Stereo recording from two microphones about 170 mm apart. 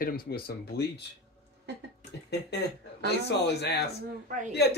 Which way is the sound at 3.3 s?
75° left (ahead or behind).